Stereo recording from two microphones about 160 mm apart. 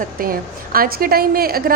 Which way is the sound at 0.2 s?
65° right (ahead or behind).